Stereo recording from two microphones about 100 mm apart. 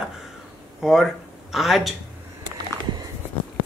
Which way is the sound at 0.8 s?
Centre (ahead or behind).